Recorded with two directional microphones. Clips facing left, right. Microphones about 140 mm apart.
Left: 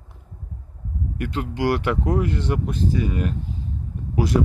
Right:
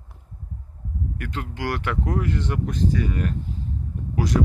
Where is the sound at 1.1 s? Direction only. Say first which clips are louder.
Left 9 dB; 20° left (ahead or behind).